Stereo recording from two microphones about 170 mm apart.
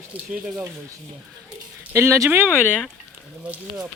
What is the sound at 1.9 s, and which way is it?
Speech, 15° right (ahead or behind).